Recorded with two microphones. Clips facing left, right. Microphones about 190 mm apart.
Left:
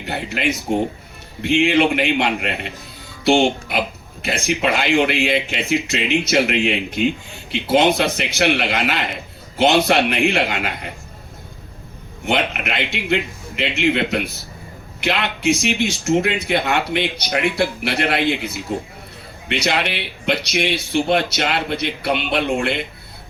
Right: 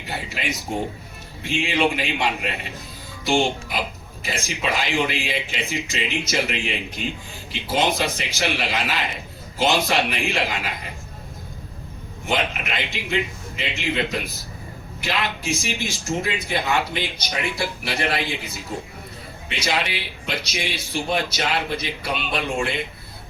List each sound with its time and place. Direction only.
0.0 s a man's voice: 60° left (ahead or behind)
12.2 s a man's voice: 65° left (ahead or behind)